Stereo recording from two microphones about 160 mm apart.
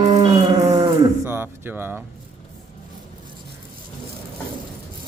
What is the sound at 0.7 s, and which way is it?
Music, 20° right (ahead or behind).